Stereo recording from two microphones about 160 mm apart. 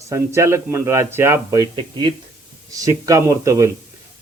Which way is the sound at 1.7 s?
30° right (ahead or behind).